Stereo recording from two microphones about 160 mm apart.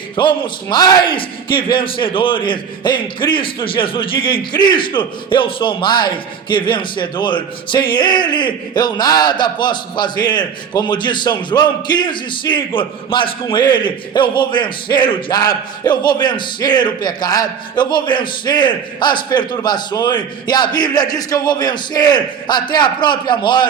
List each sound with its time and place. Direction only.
0.2 s a man's voice: 30° left (ahead or behind)